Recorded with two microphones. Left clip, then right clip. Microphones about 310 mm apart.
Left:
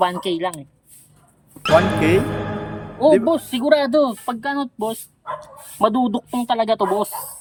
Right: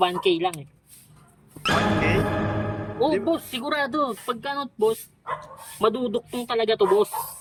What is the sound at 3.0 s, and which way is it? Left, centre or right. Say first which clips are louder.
Speech: left 8 dB; centre.